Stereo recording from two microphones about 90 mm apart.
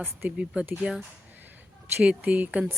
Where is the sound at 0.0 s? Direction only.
20° right (ahead or behind).